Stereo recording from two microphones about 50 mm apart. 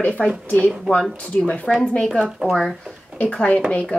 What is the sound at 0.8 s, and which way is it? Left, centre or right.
Speech, centre.